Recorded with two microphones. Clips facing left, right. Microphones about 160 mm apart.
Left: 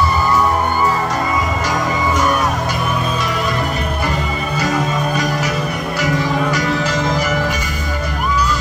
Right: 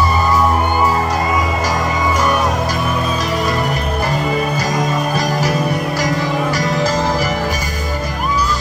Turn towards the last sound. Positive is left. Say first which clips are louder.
# even
turn(degrees=-40)  # may be behind; listen again after turning